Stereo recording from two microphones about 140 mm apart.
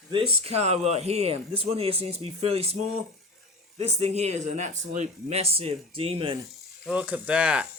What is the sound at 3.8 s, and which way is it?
Speech, 50° right (ahead or behind).